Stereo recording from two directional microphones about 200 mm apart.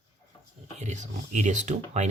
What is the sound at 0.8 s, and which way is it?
Speech, 35° right (ahead or behind).